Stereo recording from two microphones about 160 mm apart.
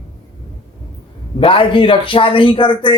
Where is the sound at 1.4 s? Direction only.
35° left (ahead or behind).